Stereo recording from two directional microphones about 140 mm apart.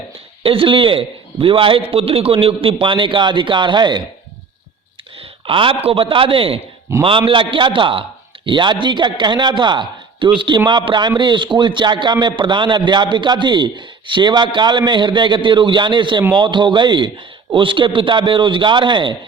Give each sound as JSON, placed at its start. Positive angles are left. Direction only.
{"t": 0.4, "sound": "a man's voice", "side_deg": -40}
{"t": 5.1, "sound": "a man's voice", "side_deg": -40}